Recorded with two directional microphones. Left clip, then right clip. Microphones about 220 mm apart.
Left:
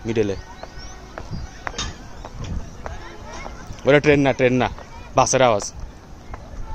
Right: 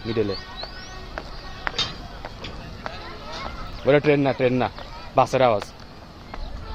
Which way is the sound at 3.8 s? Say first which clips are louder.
Left 3 dB; 25° left (ahead or behind).